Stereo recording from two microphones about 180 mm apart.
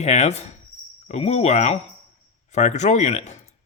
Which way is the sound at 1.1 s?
35° left (ahead or behind).